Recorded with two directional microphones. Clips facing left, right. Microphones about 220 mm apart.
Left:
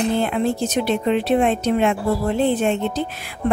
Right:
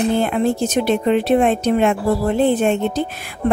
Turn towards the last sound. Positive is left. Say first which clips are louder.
# right 3 dB
turn(degrees=-50)  # may be behind; listen again after turning